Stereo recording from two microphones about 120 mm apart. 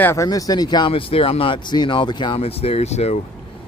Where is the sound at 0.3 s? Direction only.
30° left (ahead or behind).